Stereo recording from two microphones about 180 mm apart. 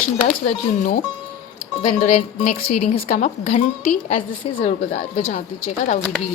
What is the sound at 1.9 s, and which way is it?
A woman's voice, 40° left (ahead or behind).